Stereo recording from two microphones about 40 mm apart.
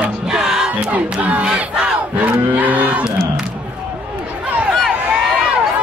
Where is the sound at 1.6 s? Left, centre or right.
Right.